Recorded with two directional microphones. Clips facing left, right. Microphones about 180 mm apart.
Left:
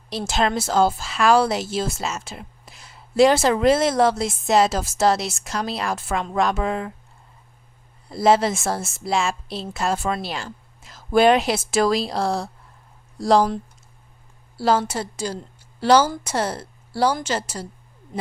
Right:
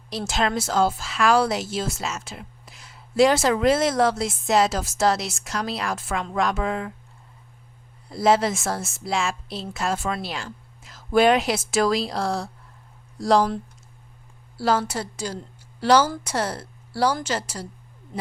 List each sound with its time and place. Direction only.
0.1 s a woman's voice: 25° left (ahead or behind)
8.1 s a woman's voice: 30° left (ahead or behind)
14.6 s a woman's voice: 25° left (ahead or behind)